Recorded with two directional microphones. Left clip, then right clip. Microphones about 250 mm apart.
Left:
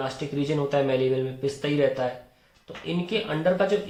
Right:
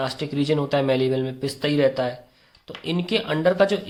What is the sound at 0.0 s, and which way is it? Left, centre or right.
Speech, right.